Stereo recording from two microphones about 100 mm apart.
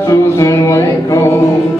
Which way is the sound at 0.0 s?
30° left (ahead or behind).